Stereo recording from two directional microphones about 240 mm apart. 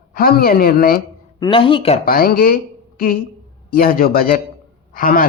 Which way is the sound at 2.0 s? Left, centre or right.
Left.